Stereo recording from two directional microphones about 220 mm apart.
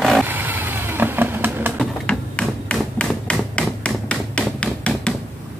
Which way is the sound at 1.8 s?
5° left (ahead or behind).